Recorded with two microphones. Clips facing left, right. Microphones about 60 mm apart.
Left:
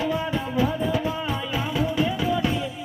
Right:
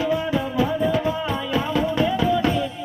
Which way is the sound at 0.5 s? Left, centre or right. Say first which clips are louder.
Right 2 dB; centre.